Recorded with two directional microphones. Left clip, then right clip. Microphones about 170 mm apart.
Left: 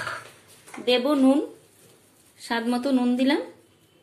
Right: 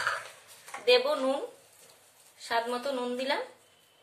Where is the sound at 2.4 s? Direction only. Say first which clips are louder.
Left 3 dB; 40° left (ahead or behind).